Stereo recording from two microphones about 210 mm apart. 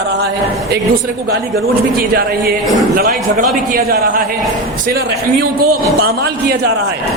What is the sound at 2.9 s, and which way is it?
A man's voice, 45° right (ahead or behind).